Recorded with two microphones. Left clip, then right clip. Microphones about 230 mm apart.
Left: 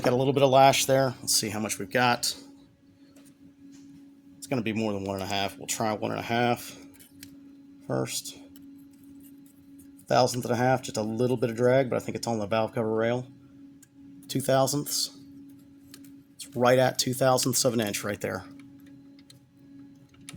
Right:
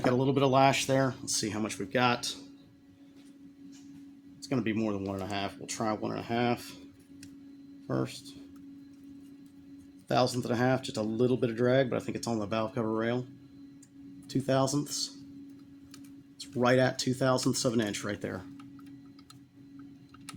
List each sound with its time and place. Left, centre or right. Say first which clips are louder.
0.0 s speech: left 4 dB; left
4.4 s speech: left 2 dB; left
7.9 s speech: left 4 dB; left
10.1 s speech: left 5 dB; left
14.3 s speech: left 5 dB; left
16.4 s speech: left 4 dB; left